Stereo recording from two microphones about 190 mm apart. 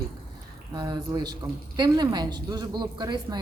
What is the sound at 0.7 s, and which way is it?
Speech, 20° right (ahead or behind).